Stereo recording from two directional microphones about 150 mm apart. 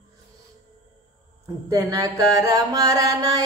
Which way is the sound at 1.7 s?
25° right (ahead or behind).